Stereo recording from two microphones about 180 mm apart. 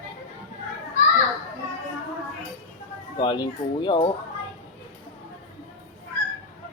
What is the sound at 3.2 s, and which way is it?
Speech, 25° left (ahead or behind).